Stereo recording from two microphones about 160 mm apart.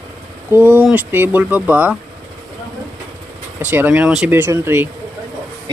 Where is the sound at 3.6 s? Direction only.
10° right (ahead or behind).